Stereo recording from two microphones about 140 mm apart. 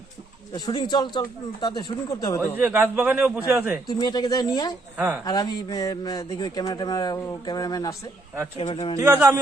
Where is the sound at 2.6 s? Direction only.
10° right (ahead or behind).